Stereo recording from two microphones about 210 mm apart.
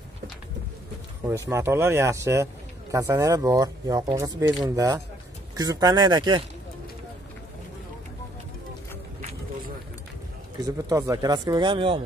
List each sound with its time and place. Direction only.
1.5 s speech: 10° right (ahead or behind)
10.6 s speech: 15° right (ahead or behind)